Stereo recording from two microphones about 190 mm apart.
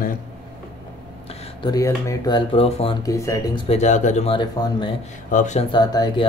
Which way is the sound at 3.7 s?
40° left (ahead or behind).